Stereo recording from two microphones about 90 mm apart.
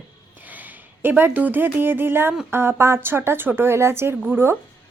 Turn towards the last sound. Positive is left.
turn(degrees=-25)  # may be behind; listen again after turning